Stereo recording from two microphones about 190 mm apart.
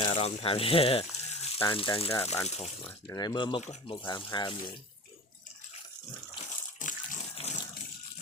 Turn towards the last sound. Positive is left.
turn(degrees=30)  # may be behind; listen again after turning